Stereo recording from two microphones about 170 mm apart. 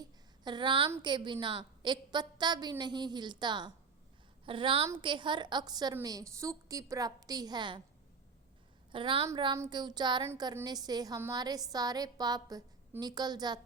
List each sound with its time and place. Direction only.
0.0 s a sound: 25° right (ahead or behind)
1.0 s a woman's voice: 25° right (ahead or behind)
8.9 s a woman's voice: 30° right (ahead or behind)